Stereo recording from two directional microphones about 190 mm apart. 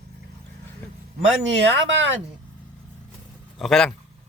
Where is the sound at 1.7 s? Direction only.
80° right.